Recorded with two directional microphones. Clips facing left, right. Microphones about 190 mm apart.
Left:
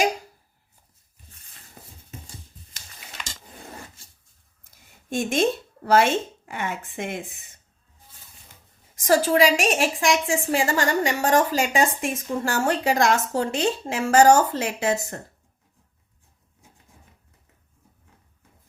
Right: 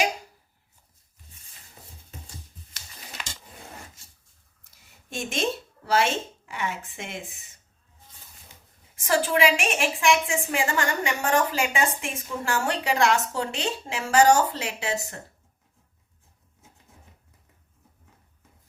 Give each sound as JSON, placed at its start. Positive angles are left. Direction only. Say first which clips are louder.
{"t": 5.0, "sound": "a woman's voice", "louder": "left 6 dB", "side_deg": 50}
{"t": 9.0, "sound": "a woman's voice", "louder": "left 4 dB", "side_deg": 40}